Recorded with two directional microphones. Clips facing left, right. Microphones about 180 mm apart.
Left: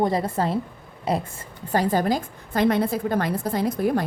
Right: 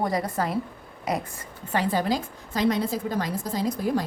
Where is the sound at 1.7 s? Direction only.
45° left (ahead or behind).